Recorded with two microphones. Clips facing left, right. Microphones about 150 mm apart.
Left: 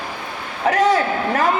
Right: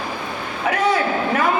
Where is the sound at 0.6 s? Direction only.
40° left (ahead or behind).